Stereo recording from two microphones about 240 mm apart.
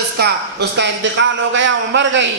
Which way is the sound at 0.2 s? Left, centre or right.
Right.